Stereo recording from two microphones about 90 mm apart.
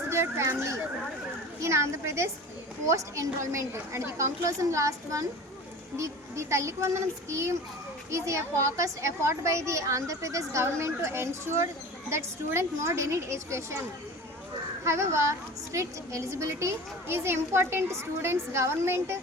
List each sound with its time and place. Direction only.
0.1 s a woman's voice: 30° right (ahead or behind)
14.8 s a woman's voice: 30° right (ahead or behind)